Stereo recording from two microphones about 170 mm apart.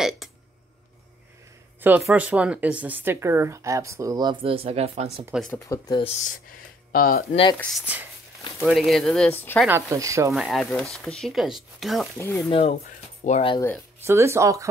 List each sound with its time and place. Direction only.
0.2 s a sound: centre (ahead or behind)
1.8 s speech: 5° right (ahead or behind); by 5.2 s 35° right (ahead or behind)
5.5 s speech: 20° left (ahead or behind)
5.9 s speech: 35° left (ahead or behind)
6.9 s speech: 60° left (ahead or behind)
7.7 s speech: 10° right (ahead or behind); by 9.7 s 10° left (ahead or behind)
9.7 s speech: 15° right (ahead or behind)
10.3 s speech: centre (ahead or behind)
12.2 s speech: 15° left (ahead or behind)
12.4 s speech: 35° left (ahead or behind)
12.8 s music: 45° left (ahead or behind)
14.0 s speech: 15° right (ahead or behind)